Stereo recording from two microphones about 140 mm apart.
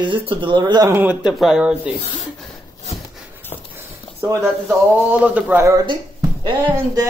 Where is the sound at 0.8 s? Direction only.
15° right (ahead or behind).